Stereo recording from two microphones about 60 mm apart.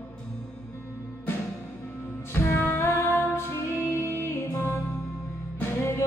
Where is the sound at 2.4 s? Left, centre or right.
Left.